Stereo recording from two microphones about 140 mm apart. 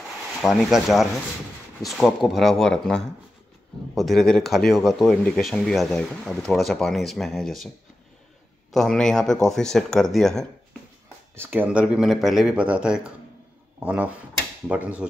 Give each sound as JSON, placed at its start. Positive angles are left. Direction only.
{"t": 0.4, "sound": "speech", "side_deg": 0}
{"t": 8.7, "sound": "speech", "side_deg": 5}
{"t": 11.3, "sound": "speech", "side_deg": -15}